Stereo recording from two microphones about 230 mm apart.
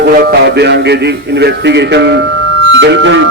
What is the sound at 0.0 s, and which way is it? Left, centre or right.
A man's voice, right.